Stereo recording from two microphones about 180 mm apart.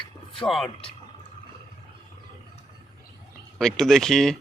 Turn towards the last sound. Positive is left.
turn(degrees=0)  # may be behind; listen again after turning